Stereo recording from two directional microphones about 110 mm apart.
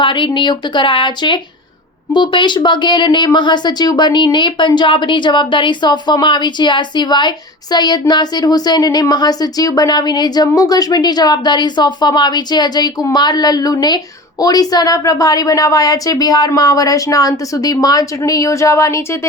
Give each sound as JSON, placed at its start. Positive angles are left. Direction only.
{"t": 0.0, "sound": "speech", "side_deg": 45}